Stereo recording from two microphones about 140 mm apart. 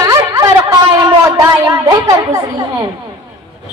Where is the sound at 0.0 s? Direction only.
25° right (ahead or behind).